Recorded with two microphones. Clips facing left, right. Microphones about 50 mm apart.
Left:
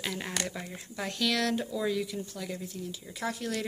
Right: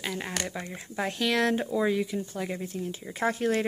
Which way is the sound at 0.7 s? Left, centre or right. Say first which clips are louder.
Right 5 dB; right.